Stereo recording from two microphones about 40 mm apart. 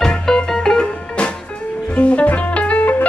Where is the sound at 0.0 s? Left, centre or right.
Centre.